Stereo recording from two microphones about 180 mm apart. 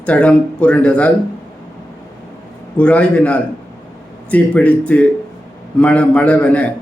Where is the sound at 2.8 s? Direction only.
5° left (ahead or behind).